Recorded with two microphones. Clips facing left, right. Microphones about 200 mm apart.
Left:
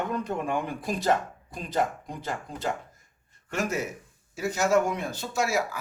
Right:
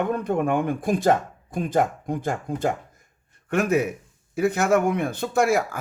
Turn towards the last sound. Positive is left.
turn(degrees=-55)  # may be behind; listen again after turning